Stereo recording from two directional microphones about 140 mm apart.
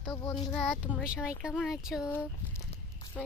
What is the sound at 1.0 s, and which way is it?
Child singing, 5° right (ahead or behind).